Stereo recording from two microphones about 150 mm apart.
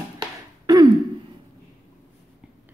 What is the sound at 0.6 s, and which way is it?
Throat clearing, 25° right (ahead or behind).